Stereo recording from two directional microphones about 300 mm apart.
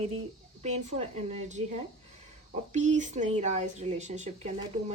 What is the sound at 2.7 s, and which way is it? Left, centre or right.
A woman's voice, right.